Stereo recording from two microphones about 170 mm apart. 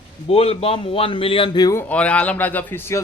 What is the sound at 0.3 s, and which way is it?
A man's voice, 35° left (ahead or behind).